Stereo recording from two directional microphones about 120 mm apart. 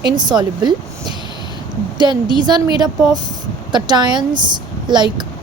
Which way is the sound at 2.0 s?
40° right (ahead or behind).